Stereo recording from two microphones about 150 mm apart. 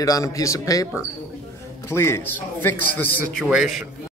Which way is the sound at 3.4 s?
5° right (ahead or behind).